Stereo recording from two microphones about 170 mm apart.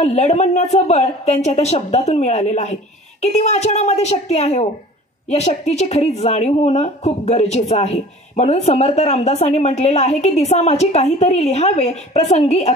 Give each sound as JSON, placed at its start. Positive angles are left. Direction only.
{"t": 0.0, "sound": "a woman's voice", "side_deg": 40}